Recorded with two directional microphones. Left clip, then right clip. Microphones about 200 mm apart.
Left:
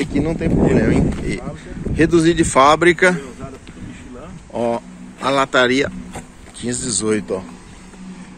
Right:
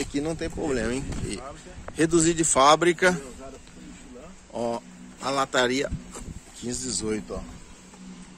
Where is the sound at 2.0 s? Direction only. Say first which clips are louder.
Left 8 dB; 5° right (ahead or behind).